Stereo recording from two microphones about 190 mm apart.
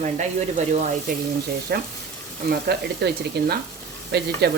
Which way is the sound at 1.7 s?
55° right (ahead or behind).